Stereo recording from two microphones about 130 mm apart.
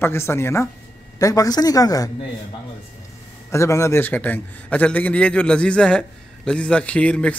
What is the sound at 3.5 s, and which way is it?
Speech, 20° left (ahead or behind).